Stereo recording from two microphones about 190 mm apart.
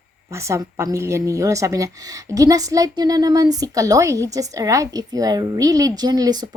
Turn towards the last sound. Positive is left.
turn(degrees=-20)  # may be behind; listen again after turning